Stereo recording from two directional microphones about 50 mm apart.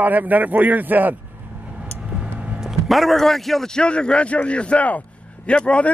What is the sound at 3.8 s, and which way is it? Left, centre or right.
A man's voice, centre.